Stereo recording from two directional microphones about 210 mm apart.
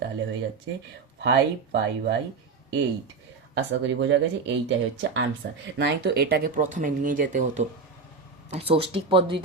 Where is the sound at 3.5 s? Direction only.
60° right (ahead or behind).